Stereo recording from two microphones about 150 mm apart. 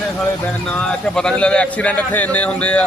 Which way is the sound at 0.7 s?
5° left (ahead or behind).